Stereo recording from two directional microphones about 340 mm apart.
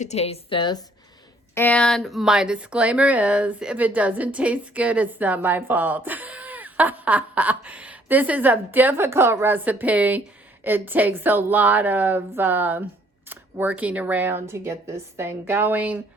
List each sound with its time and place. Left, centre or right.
0.0 s a woman's voice: centre